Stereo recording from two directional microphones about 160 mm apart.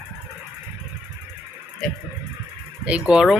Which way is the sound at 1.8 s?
5° left (ahead or behind).